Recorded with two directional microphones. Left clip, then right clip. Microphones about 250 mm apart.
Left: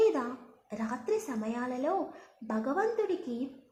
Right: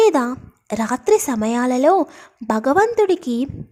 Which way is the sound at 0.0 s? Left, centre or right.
Right.